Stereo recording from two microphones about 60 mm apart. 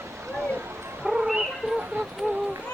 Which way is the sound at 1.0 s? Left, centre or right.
Centre.